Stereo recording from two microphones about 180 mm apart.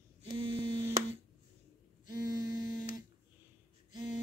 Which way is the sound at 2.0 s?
20° right (ahead or behind).